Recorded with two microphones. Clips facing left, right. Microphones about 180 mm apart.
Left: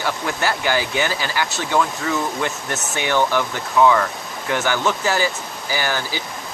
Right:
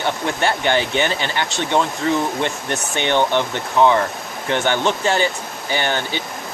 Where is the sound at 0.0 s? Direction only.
25° right (ahead or behind).